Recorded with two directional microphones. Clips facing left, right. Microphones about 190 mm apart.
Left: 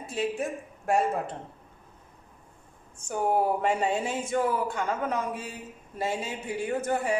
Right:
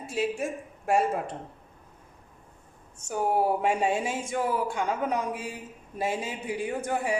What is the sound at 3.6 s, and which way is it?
Speech, 10° right (ahead or behind).